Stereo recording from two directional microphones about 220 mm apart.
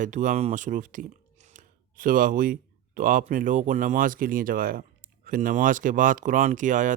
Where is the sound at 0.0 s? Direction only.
35° right (ahead or behind).